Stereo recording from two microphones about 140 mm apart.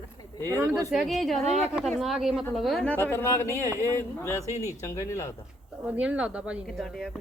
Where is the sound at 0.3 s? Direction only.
15° left (ahead or behind).